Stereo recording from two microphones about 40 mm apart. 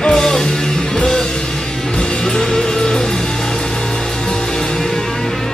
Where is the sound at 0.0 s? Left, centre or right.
Centre.